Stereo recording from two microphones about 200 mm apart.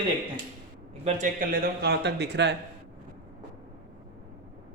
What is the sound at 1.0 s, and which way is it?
Speech, 35° right (ahead or behind).